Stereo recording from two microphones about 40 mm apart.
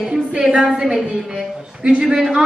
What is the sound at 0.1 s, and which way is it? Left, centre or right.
A woman's voice, right.